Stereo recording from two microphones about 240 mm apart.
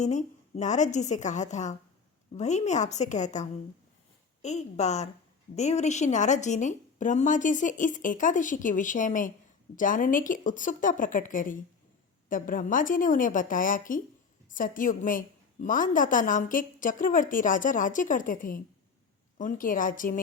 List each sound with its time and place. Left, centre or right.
0.0 s a woman's voice: left